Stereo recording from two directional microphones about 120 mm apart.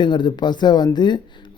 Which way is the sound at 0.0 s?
40° left (ahead or behind).